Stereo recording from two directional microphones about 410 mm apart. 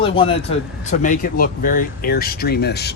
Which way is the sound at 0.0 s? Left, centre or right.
Centre.